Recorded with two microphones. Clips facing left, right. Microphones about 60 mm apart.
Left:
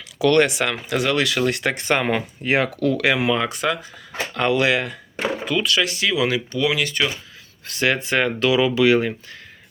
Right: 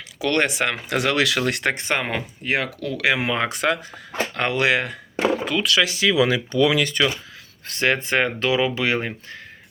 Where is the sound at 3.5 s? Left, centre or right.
Right.